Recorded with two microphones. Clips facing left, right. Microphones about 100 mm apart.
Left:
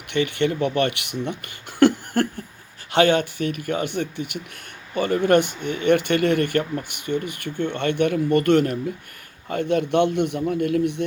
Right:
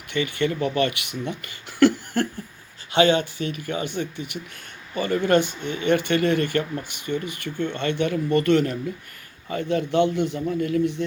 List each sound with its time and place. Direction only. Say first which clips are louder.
0.1 s speech: left 2 dB; 60° left (ahead or behind)
4.9 s speech: left 2 dB; 55° left (ahead or behind)